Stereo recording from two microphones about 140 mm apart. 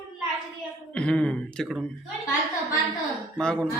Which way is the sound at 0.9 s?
5° left (ahead or behind).